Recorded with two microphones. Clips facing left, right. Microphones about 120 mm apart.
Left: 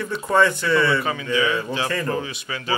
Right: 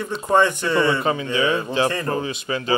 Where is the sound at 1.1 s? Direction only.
30° right (ahead or behind).